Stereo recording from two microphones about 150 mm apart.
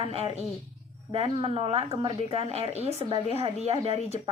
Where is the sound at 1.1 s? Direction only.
40° right (ahead or behind).